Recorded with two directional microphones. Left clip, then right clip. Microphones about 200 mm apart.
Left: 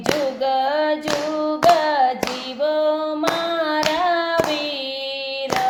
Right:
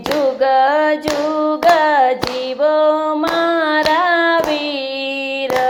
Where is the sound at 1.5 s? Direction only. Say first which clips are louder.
Right 3 dB; 20° right (ahead or behind).